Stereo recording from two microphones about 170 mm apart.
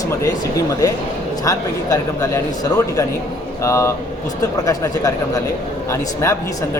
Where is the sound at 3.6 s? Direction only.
15° left (ahead or behind).